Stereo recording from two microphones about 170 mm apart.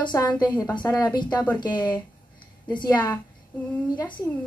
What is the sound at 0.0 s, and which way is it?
A woman's voice, 25° left (ahead or behind).